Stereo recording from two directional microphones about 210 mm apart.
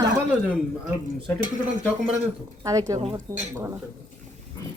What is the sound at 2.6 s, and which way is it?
Speech, 15° right (ahead or behind).